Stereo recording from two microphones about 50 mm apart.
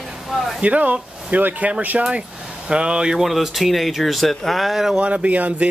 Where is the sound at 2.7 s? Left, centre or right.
Centre.